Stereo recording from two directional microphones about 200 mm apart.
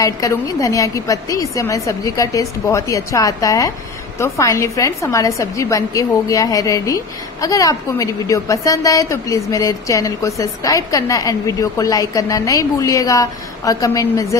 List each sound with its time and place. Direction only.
0.0 s a woman's voice: 15° left (ahead or behind)